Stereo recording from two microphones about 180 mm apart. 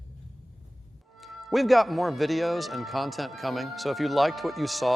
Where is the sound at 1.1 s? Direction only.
Centre (ahead or behind).